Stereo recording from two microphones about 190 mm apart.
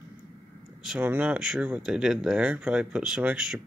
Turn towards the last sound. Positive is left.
turn(degrees=-5)  # may be behind; listen again after turning